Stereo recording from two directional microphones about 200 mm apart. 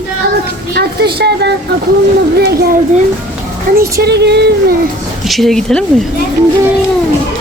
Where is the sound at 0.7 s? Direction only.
55° right (ahead or behind).